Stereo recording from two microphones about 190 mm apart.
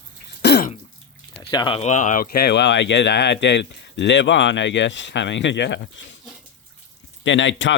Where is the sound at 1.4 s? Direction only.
25° left (ahead or behind); by 6.0 s 65° left (ahead or behind).